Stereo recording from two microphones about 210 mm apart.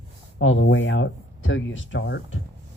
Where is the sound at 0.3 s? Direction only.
65° left (ahead or behind).